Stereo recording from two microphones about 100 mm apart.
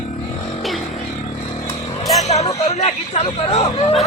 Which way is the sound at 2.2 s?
90° left.